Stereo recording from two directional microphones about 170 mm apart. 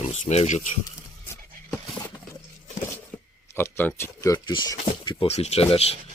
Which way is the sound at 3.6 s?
10° left (ahead or behind).